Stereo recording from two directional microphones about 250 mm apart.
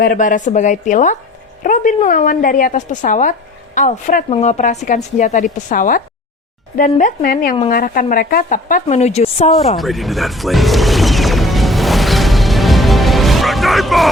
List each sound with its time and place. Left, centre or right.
0.0 s a woman's voice: left
9.5 s music: centre